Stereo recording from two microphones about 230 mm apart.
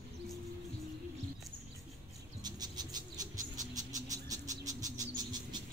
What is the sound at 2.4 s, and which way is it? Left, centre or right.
Bird, centre.